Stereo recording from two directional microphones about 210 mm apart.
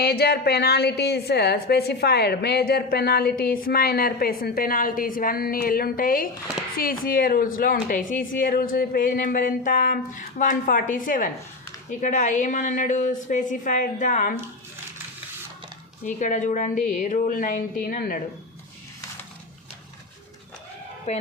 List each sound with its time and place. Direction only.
0.0 s a woman's voice: 50° left (ahead or behind)
16.0 s a woman's voice: 35° left (ahead or behind)
21.1 s a woman's voice: 30° left (ahead or behind)